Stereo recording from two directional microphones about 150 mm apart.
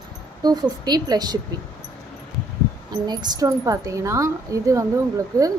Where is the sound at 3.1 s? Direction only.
25° right (ahead or behind).